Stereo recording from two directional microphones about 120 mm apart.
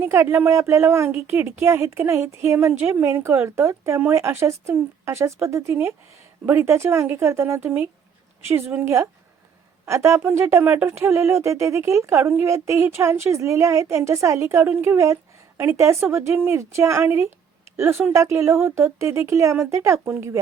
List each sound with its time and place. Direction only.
0.0 s speech: 20° right (ahead or behind)